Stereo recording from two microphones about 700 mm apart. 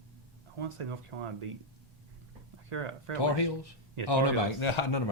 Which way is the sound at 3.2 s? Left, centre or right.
Left.